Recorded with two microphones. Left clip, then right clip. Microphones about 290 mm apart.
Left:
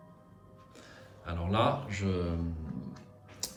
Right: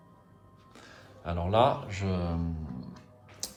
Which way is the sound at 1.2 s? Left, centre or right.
Centre.